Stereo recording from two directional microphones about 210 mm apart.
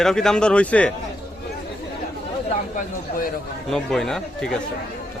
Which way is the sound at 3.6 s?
Centre (ahead or behind).